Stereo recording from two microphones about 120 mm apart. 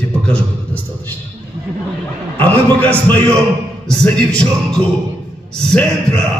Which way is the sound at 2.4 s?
15° left (ahead or behind).